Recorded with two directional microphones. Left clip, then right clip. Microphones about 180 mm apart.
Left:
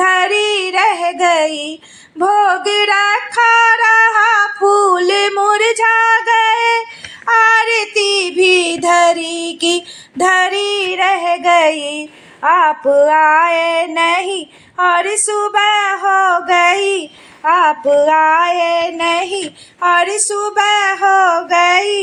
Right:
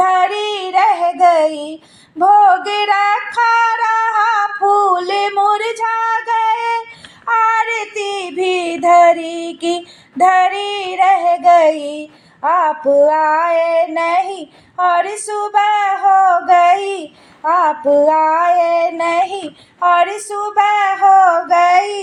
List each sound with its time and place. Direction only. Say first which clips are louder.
0.0 s child singing: left 1 dB; 25° left (ahead or behind)
2.4 s a sound: right 1 dB; 25° left (ahead or behind)
5.8 s female singing: left 5 dB; 30° left (ahead or behind)